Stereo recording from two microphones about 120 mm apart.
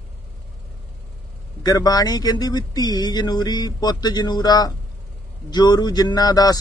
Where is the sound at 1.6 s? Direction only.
35° left (ahead or behind).